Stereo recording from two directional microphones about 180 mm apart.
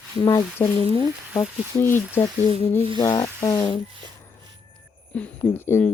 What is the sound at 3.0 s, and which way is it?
Speech, 20° left (ahead or behind).